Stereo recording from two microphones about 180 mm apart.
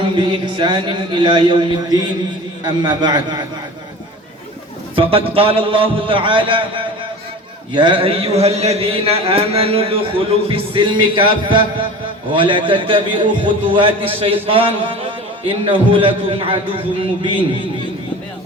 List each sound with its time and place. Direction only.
0.0 s a man's voice: 25° right (ahead or behind)
5.3 s a man's voice: 30° right (ahead or behind)